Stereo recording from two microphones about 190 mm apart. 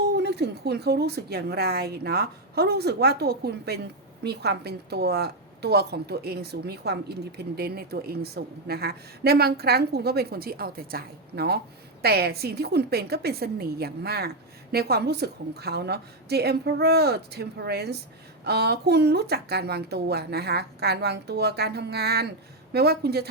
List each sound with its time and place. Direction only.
0.2 s a woman's voice: 60° right (ahead or behind)